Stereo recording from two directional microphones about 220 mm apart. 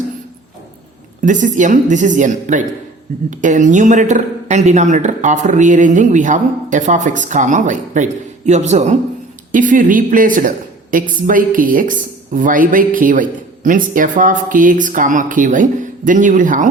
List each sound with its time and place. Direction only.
1.2 s speech: 35° right (ahead or behind)